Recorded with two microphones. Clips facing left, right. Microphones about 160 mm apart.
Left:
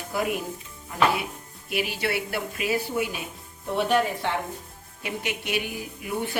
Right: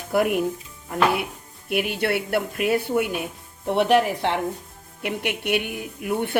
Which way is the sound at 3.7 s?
75° right (ahead or behind).